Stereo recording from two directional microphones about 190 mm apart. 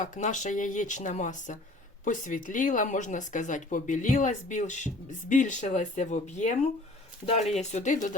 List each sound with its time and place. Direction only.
0.0 s speech: 40° left (ahead or behind)